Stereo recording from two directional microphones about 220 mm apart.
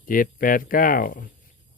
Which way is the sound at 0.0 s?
40° left (ahead or behind).